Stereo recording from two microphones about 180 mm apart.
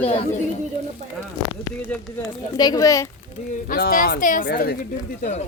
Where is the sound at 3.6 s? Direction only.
50° left (ahead or behind).